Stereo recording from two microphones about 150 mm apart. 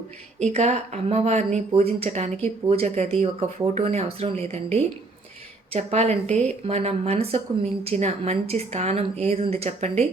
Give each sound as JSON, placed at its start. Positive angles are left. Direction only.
{"t": 0.3, "sound": "a woman's voice", "side_deg": -50}